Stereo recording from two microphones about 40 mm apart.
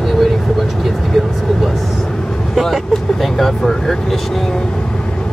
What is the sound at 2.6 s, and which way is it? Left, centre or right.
Speech, centre.